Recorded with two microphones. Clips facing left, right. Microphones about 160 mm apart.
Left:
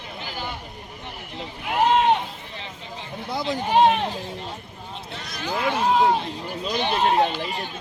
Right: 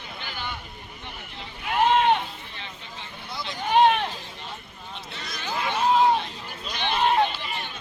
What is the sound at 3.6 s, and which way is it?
Sheep, 35° left (ahead or behind).